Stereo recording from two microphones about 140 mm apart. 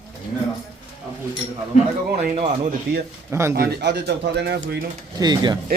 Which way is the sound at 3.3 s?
20° right (ahead or behind).